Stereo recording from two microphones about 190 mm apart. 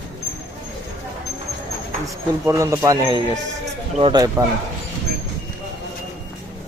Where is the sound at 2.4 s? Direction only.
15° right (ahead or behind).